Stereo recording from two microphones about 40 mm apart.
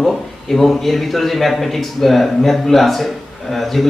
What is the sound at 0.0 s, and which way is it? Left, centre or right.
A man's voice, centre.